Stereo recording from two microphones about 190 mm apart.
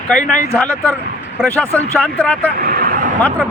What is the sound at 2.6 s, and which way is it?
Vehicle, 50° right (ahead or behind).